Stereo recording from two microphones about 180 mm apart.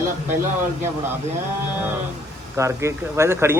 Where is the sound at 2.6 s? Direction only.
15° right (ahead or behind).